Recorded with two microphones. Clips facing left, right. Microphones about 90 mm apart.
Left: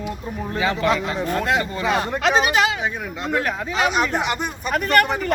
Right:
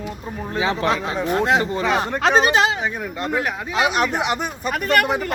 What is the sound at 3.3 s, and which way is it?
Speech, 15° right (ahead or behind).